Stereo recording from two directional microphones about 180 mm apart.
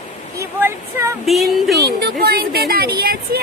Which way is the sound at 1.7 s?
60° right (ahead or behind).